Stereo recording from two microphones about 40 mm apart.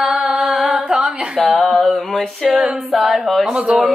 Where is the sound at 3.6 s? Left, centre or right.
Right.